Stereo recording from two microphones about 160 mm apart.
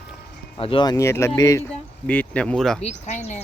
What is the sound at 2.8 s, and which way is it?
Speech, 45° left (ahead or behind).